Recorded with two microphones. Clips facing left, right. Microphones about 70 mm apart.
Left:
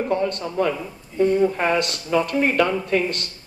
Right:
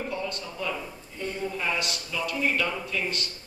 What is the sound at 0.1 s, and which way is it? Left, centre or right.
A man's voice, left.